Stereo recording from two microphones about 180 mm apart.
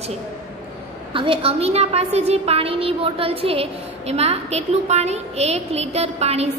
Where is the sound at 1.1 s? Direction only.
30° right (ahead or behind).